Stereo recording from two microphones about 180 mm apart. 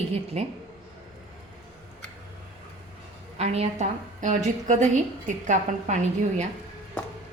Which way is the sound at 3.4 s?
35° right (ahead or behind).